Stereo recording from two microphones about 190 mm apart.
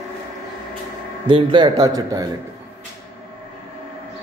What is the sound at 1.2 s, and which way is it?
Speech, 25° right (ahead or behind).